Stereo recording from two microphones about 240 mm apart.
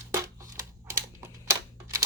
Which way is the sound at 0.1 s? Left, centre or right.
Centre.